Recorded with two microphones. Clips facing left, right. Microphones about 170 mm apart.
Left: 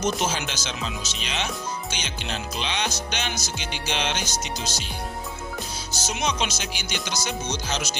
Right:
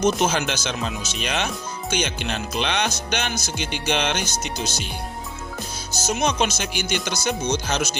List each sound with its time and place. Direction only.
0.0 s music: 60° right (ahead or behind)
5.9 s music: 45° right (ahead or behind)